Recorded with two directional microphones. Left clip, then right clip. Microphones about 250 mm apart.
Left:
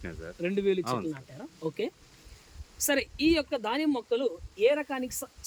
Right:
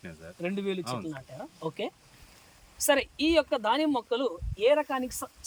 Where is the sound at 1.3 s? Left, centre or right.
Centre.